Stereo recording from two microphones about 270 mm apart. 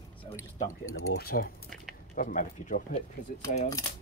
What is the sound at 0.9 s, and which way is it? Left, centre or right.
Speech, left.